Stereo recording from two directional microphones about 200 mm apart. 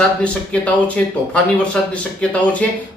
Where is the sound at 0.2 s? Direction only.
5° left (ahead or behind).